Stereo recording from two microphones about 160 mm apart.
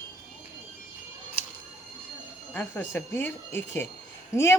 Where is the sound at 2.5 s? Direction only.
10° left (ahead or behind).